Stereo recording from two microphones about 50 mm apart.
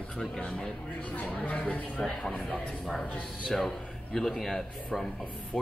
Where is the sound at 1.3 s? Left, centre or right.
Left.